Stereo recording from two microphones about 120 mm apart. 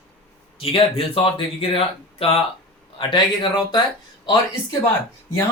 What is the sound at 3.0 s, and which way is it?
Speech, 40° left (ahead or behind).